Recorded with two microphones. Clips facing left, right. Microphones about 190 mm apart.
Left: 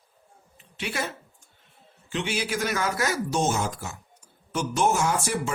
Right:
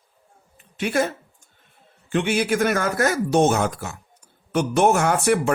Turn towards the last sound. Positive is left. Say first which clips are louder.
# right 7 dB
turn(degrees=-60)  # may be behind; listen again after turning